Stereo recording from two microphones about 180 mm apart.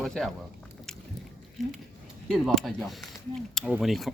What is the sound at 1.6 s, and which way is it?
Speech, centre (ahead or behind).